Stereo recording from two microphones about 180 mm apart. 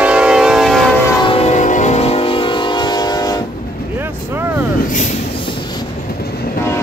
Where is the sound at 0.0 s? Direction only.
5° right (ahead or behind).